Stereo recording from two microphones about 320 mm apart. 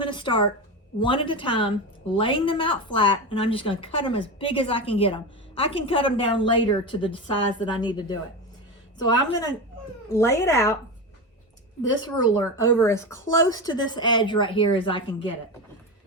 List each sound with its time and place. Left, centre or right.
0.0 s a sound: centre
0.9 s a woman's voice: centre
12.1 s a woman's voice: centre